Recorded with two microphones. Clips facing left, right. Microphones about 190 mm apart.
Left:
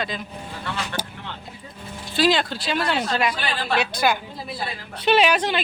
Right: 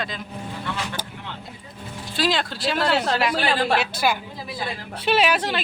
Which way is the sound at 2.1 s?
Centre (ahead or behind).